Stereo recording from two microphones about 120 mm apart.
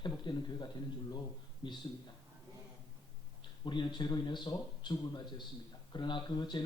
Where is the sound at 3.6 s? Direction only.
40° left (ahead or behind).